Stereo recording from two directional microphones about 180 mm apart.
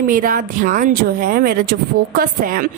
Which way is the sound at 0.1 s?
50° right (ahead or behind).